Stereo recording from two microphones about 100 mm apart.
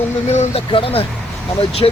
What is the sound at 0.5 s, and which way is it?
Speech, 70° left (ahead or behind).